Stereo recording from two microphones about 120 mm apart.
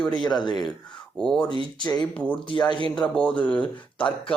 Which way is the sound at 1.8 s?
35° left (ahead or behind).